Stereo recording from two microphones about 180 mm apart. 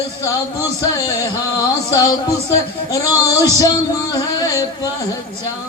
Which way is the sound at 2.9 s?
20° left (ahead or behind).